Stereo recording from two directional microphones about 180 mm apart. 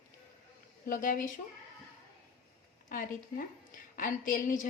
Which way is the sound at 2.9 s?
50° left (ahead or behind).